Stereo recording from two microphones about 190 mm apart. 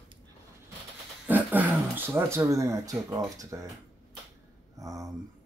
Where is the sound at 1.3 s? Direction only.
10° right (ahead or behind).